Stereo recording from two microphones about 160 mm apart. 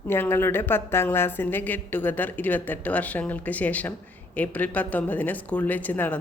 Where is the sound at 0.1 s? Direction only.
15° left (ahead or behind).